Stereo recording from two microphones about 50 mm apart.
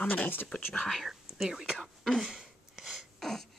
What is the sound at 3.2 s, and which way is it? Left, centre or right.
Beatboxing, centre.